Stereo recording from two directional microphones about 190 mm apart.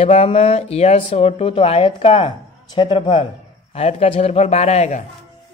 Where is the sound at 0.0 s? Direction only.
30° left (ahead or behind).